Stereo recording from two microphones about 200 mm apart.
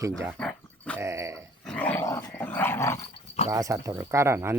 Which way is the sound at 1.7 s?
5° left (ahead or behind).